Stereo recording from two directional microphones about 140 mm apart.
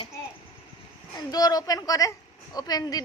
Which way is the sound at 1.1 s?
25° left (ahead or behind).